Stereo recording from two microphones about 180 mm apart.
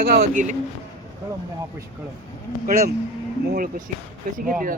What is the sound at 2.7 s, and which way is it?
A man's voice, 50° right (ahead or behind).